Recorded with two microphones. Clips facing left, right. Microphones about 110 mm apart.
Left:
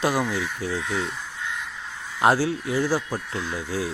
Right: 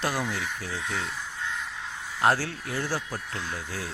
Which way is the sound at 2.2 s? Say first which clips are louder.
Left 5 dB; 15° left (ahead or behind).